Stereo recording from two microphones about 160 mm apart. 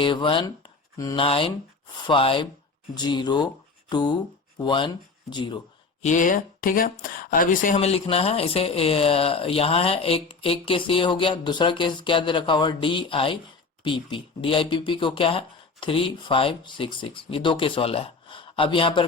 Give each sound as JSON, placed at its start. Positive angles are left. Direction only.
{"t": 0.0, "sound": "speech", "side_deg": 30}
{"t": 6.0, "sound": "speech", "side_deg": 50}
{"t": 7.8, "sound": "speech", "side_deg": 40}